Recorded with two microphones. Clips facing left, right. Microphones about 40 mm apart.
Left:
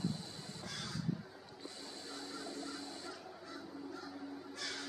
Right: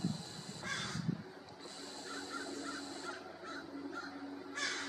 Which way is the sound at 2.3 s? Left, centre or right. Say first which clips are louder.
Right 1 dB; right.